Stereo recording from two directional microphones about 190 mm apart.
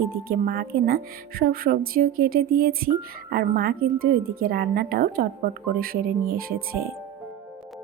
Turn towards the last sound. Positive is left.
turn(degrees=-50)  # may be behind; listen again after turning